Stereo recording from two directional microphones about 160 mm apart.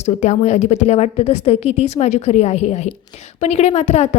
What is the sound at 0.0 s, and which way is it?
A woman's voice, 45° left (ahead or behind).